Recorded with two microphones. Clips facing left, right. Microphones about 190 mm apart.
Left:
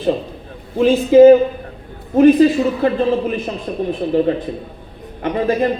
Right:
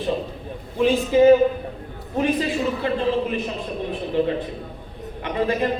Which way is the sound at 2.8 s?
40° left (ahead or behind).